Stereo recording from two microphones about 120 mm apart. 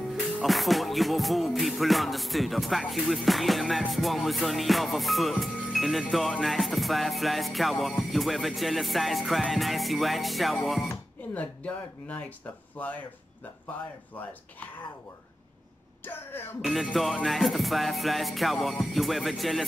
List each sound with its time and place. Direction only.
0.1 s music: centre (ahead or behind)
11.3 s speech: 10° left (ahead or behind)
16.0 s speech: 15° left (ahead or behind)
16.6 s music: centre (ahead or behind)